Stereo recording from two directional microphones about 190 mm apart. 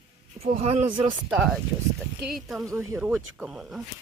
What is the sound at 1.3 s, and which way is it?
Speech, centre (ahead or behind).